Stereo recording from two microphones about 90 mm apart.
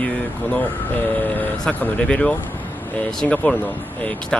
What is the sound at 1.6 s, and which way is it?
Speech, 15° left (ahead or behind).